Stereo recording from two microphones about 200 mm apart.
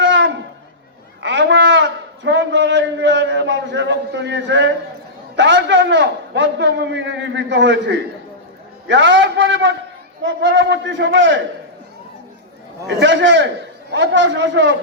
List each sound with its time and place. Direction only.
0.0 s a sound: 65° right (ahead or behind)
5.4 s a man's voice: 65° right (ahead or behind)
12.9 s a man's voice: 65° right (ahead or behind)